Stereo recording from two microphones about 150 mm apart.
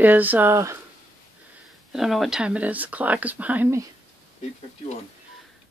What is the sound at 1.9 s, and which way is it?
Speech, centre (ahead or behind).